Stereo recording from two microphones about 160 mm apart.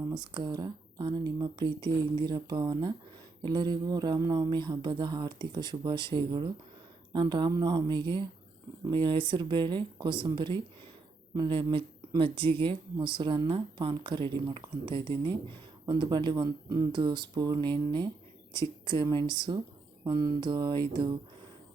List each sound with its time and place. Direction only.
0.0 s speech: 25° right (ahead or behind)